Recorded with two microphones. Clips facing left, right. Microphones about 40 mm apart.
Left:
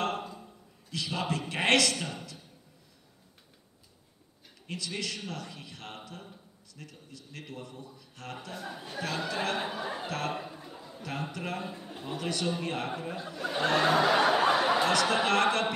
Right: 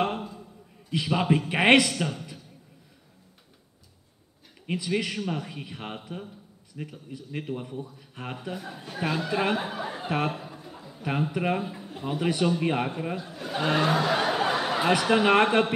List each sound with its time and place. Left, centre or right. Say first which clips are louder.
0.8 s a man's voice: right 8 dB; right
4.6 s a man's voice: right 8 dB; right
8.5 s speech: right 1 dB; centre
9.3 s a man's voice: right 7 dB; centre
9.6 s speech: right 2 dB; centre
10.0 s a man's voice: right 9 dB; right
10.3 s a sound: even; centre
11.0 s a man's voice: right 9 dB; centre
11.6 s a man's voice: right 3 dB; centre
12.0 s a man's voice: right 7 dB; centre
13.8 s a sound: left 1 dB; centre
14.8 s a man's voice: right 4 dB; centre